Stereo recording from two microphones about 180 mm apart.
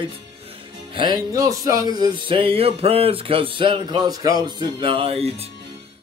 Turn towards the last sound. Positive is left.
turn(degrees=-35)  # may be behind; listen again after turning